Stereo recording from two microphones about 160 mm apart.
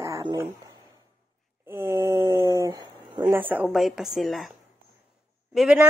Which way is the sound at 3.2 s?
10° right (ahead or behind).